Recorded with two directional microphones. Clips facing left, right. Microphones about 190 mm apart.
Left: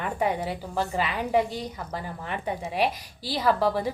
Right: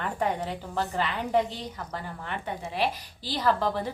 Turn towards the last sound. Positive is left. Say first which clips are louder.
# left 2 dB
turn(degrees=10)  # may be behind; listen again after turning